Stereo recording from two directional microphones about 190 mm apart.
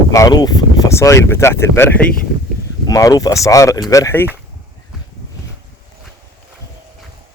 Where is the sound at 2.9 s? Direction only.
20° left (ahead or behind).